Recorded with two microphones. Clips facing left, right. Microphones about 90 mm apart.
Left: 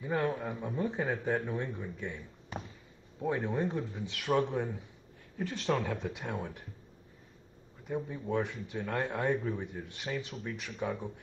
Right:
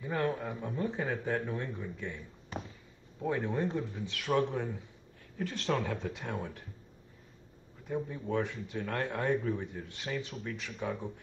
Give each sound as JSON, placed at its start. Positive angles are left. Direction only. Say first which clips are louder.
{"t": 0.0, "sound": "speech", "louder": "left 1 dB", "side_deg": 5}
{"t": 0.8, "sound": "speech", "louder": "left 1 dB", "side_deg": 15}
{"t": 5.7, "sound": "speech", "louder": "left 1 dB", "side_deg": 0}
{"t": 5.9, "sound": "speech", "louder": "even", "side_deg": 15}
{"t": 7.9, "sound": "speech", "louder": "even", "side_deg": 10}